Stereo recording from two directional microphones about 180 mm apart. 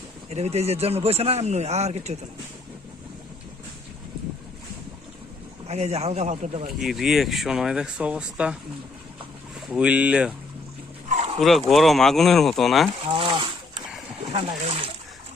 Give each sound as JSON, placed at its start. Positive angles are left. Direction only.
{"t": 0.3, "sound": "speech", "side_deg": -35}
{"t": 5.6, "sound": "speech", "side_deg": -35}
{"t": 6.7, "sound": "speech", "side_deg": 0}
{"t": 9.6, "sound": "speech", "side_deg": -5}
{"t": 11.1, "sound": "dog", "side_deg": -40}
{"t": 11.3, "sound": "speech", "side_deg": 0}
{"t": 13.1, "sound": "a sound", "side_deg": -30}
{"t": 14.3, "sound": "speech", "side_deg": -30}